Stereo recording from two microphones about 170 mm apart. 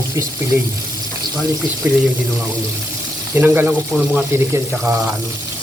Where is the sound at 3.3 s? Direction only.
10° right (ahead or behind).